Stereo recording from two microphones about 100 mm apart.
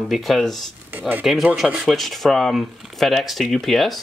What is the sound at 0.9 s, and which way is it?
Speech, 20° right (ahead or behind).